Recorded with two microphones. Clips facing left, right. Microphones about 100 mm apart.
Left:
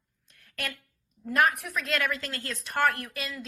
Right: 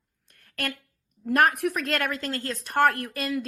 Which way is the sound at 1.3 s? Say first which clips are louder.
Right 4 dB; 60° right (ahead or behind).